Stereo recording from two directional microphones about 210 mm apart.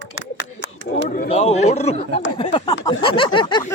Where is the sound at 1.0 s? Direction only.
40° left (ahead or behind).